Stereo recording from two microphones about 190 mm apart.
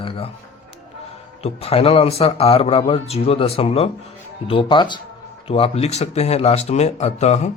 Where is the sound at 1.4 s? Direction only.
30° left (ahead or behind).